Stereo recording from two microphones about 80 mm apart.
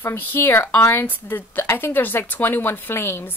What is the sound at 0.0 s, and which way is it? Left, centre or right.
Speech, left.